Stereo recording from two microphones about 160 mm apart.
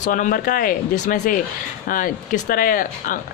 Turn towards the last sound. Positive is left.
turn(degrees=55)  # may be behind; listen again after turning